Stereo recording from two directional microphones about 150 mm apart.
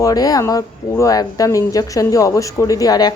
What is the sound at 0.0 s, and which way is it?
Speech, 25° left (ahead or behind).